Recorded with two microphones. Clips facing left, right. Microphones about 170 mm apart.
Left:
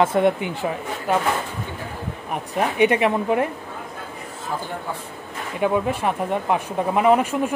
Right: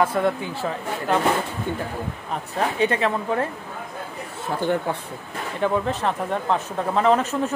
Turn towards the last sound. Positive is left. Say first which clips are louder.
# left 2 dB
turn(degrees=10)  # may be behind; listen again after turning